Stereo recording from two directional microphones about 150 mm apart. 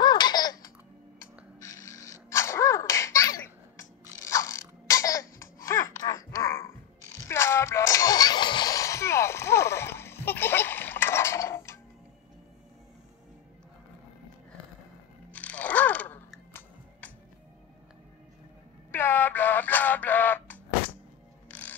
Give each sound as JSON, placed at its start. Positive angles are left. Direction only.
{"t": 0.0, "sound": "laughter", "side_deg": 30}
{"t": 1.6, "sound": "sneeze", "side_deg": 20}
{"t": 4.2, "sound": "mechanisms", "side_deg": 20}
{"t": 5.7, "sound": "a sound", "side_deg": 20}
{"t": 7.2, "sound": "music", "side_deg": 15}
{"t": 15.3, "sound": "a sound", "side_deg": 10}
{"t": 18.9, "sound": "synthetic singing", "side_deg": 15}
{"t": 21.5, "sound": "music", "side_deg": 10}